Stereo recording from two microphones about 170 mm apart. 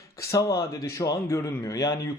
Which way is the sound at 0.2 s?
20° left (ahead or behind).